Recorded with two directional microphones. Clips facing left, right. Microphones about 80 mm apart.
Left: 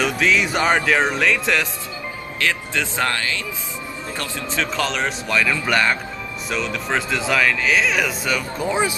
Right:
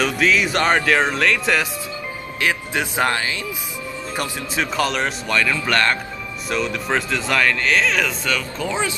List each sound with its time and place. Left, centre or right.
0.0 s speech: centre
2.4 s speech: centre
4.2 s speech: centre